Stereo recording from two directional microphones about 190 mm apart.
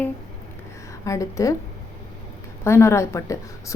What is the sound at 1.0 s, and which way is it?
Speech, 15° left (ahead or behind).